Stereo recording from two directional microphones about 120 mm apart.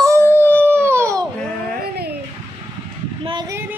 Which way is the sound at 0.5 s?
20° right (ahead or behind).